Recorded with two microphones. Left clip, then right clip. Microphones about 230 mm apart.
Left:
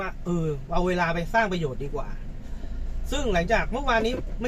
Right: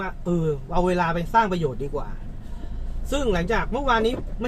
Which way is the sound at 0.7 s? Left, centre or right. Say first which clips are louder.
Right 2 dB; centre.